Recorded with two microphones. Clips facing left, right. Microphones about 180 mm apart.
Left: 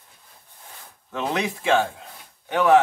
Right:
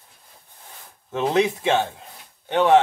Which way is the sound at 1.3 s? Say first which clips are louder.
Right 2 dB; 25° right (ahead or behind).